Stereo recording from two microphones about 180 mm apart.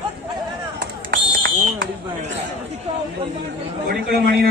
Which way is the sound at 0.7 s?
80° right.